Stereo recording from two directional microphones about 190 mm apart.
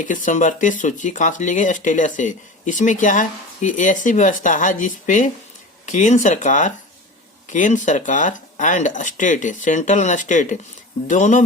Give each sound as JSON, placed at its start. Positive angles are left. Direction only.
{"t": 0.0, "sound": "speech", "side_deg": 45}